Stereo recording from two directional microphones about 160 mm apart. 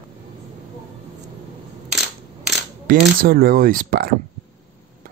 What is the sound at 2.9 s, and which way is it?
Speech, 65° right (ahead or behind).